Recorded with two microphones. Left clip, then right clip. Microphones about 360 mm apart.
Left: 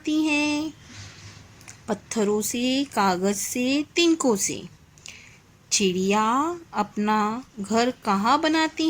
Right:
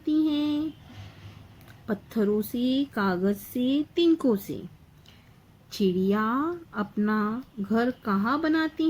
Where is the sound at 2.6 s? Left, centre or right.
Centre.